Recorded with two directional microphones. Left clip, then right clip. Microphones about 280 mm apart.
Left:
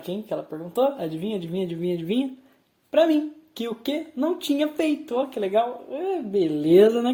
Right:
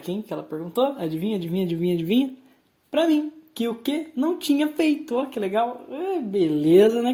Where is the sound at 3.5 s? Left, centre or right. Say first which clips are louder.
Right 2 dB; right.